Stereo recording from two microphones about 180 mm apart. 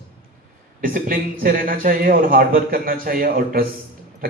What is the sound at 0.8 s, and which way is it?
Speech, 50° right (ahead or behind).